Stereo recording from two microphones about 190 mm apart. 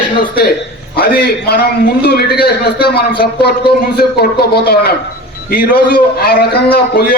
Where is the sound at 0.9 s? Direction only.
55° left (ahead or behind).